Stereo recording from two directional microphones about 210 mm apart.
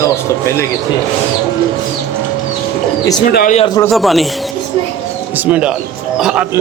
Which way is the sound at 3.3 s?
35° left (ahead or behind).